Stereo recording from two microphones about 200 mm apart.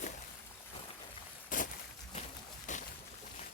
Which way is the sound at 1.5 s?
40° left (ahead or behind).